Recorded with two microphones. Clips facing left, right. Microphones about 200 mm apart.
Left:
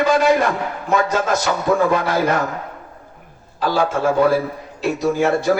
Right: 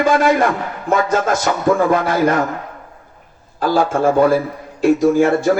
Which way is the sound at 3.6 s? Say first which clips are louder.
Right 3 dB; 50° right (ahead or behind).